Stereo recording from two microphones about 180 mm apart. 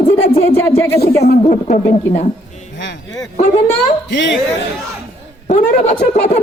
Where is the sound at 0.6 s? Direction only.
15° left (ahead or behind).